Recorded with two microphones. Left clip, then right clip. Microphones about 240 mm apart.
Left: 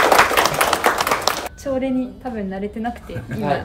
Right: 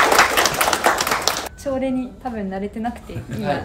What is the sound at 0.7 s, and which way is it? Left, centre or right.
Applause, left.